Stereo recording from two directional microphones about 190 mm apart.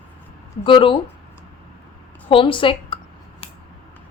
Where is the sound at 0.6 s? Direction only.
25° left (ahead or behind).